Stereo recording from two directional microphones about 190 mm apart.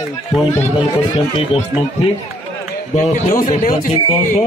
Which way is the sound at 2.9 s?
40° left (ahead or behind).